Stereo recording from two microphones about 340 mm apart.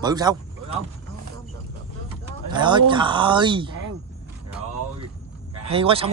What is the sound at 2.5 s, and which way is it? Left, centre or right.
Speech, centre.